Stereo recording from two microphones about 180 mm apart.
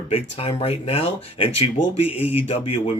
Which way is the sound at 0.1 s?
35° left (ahead or behind).